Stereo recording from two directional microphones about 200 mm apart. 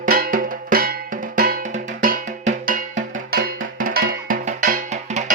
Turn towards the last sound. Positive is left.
turn(degrees=-40)  # may be behind; listen again after turning